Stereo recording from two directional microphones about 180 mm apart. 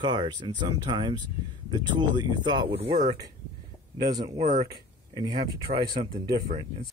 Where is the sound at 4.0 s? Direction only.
20° right (ahead or behind).